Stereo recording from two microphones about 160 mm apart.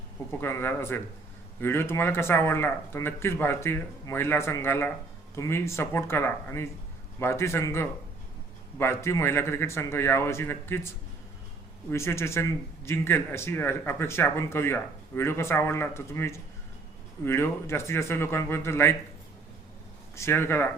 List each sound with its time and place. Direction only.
0.3 s speech: 15° left (ahead or behind)
20.1 s speech: 15° left (ahead or behind)